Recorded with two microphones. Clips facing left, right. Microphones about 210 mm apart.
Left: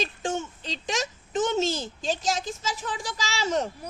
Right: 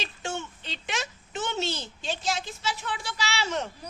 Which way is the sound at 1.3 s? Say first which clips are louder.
Left 6 dB; 45° left (ahead or behind).